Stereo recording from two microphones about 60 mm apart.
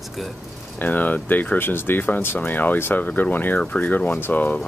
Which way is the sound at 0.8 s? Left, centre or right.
Left.